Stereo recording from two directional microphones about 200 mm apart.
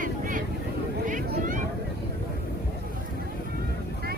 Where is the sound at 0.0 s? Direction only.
40° right (ahead or behind).